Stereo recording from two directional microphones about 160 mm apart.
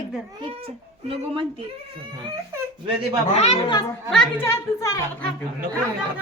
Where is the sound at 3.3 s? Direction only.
45° left (ahead or behind).